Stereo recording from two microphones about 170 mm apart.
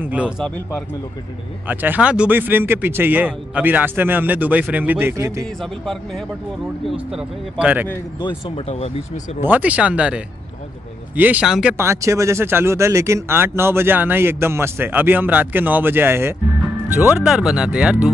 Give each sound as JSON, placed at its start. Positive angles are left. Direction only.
{"t": 0.0, "sound": "speech", "side_deg": -10}
{"t": 5.6, "sound": "speech", "side_deg": 0}
{"t": 8.2, "sound": "speech", "side_deg": 30}
{"t": 9.4, "sound": "speech", "side_deg": -10}
{"t": 11.7, "sound": "speech", "side_deg": -15}